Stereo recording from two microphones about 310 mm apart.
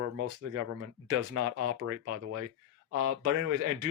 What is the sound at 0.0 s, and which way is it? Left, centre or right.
Speech, right.